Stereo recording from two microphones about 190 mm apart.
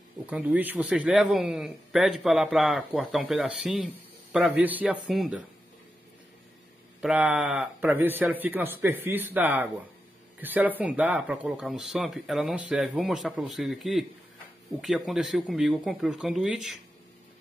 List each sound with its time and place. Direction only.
0.3 s a man's voice: 5° right (ahead or behind)
7.0 s a man's voice: 5° right (ahead or behind)